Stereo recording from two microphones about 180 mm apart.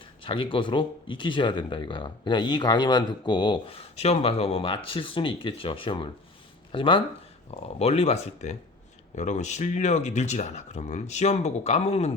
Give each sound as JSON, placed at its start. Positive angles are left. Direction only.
{"t": 0.2, "sound": "speech", "side_deg": 30}